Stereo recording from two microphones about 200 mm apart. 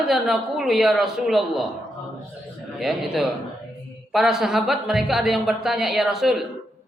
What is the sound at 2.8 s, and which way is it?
A man's voice, centre (ahead or behind).